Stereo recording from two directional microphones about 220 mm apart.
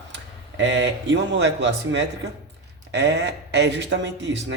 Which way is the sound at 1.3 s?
55° right (ahead or behind).